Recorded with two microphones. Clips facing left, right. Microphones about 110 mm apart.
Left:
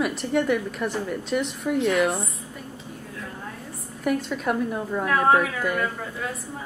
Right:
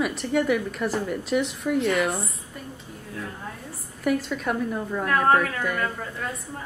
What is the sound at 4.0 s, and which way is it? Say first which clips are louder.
A woman's voice: even; centre (ahead or behind).